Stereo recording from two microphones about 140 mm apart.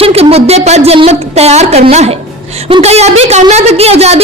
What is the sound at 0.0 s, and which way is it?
A woman's voice, 45° right (ahead or behind).